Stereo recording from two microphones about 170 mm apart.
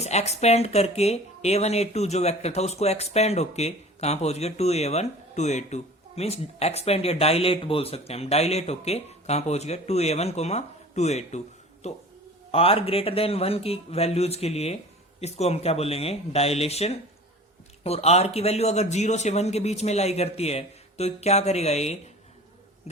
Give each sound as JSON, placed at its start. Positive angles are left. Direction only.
{"t": 0.0, "sound": "speech", "side_deg": 40}